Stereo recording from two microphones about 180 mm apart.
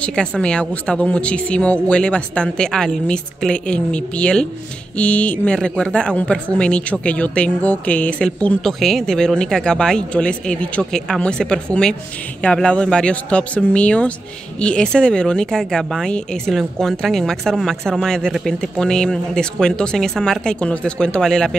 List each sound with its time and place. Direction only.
0.0 s a woman's voice: 5° left (ahead or behind)